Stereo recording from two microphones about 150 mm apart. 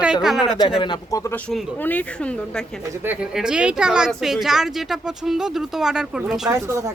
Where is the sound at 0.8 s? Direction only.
30° left (ahead or behind).